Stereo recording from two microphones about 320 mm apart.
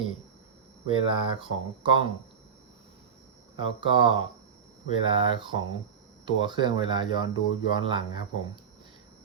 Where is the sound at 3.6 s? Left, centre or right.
Centre.